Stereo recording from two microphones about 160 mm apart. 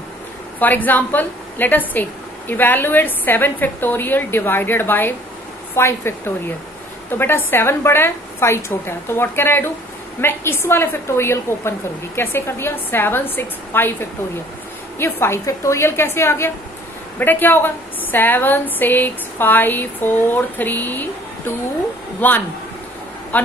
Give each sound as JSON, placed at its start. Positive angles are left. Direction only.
{"t": 0.6, "sound": "a woman's voice", "side_deg": 10}
{"t": 15.0, "sound": "a woman's voice", "side_deg": 15}